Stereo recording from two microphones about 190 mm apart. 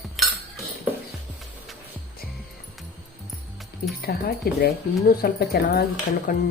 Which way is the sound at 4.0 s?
50° left (ahead or behind).